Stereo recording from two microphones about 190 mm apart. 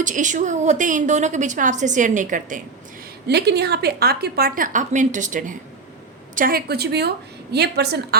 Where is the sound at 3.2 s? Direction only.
60° right (ahead or behind).